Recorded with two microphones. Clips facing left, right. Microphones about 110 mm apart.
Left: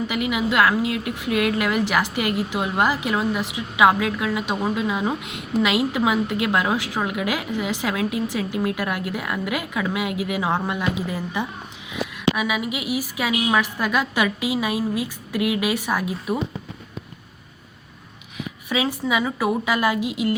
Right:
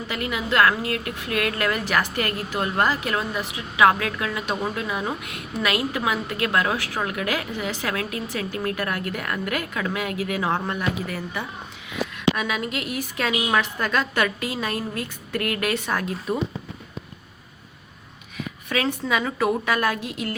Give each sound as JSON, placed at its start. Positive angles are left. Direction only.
{"t": 0.1, "sound": "a woman's voice", "side_deg": 15}
{"t": 18.7, "sound": "a woman's voice", "side_deg": 10}